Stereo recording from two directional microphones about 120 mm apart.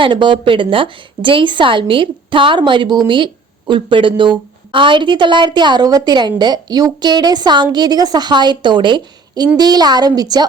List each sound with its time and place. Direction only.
0.0 s a woman's voice: 40° right (ahead or behind)